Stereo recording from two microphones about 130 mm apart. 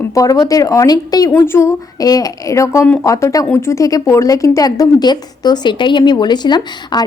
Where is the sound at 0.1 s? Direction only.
25° left (ahead or behind).